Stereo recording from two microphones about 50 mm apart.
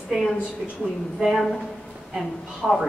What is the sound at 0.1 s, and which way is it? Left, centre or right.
Speech, centre.